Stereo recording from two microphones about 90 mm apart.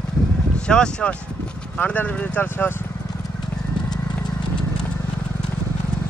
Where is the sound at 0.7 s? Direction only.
10° left (ahead or behind).